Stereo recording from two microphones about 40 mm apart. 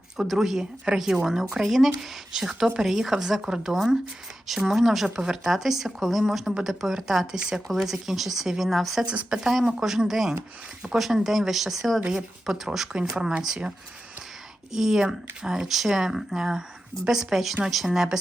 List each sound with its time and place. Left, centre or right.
0.3 s speech: centre
1.6 s speech: centre
5.0 s speech: centre
9.3 s speech: centre
12.9 s speech: right
14.7 s speech: centre
17.9 s speech: centre